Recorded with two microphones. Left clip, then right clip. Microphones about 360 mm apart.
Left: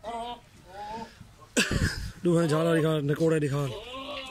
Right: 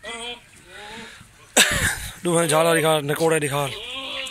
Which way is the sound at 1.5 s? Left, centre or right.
Centre.